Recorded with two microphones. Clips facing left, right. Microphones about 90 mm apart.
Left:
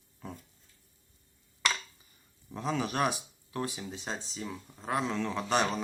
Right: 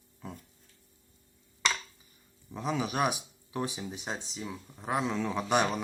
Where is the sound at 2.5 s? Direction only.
5° right (ahead or behind).